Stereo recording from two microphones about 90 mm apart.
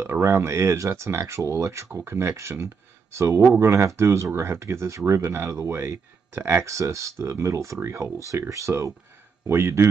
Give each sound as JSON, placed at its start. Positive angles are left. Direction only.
{"t": 0.0, "sound": "speech", "side_deg": -30}